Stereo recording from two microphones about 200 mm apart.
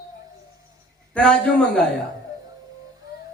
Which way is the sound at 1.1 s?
5° left (ahead or behind).